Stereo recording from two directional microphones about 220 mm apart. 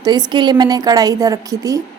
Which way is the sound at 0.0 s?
20° right (ahead or behind).